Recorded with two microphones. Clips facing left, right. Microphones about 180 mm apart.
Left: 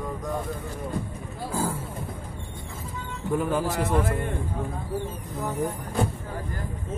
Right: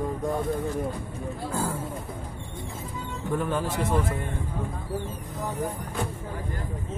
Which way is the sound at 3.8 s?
55° left (ahead or behind).